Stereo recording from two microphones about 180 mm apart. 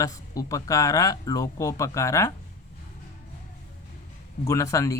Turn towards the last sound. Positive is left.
turn(degrees=15)  # may be behind; listen again after turning